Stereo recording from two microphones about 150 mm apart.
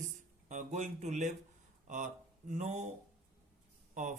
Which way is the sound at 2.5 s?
50° right (ahead or behind).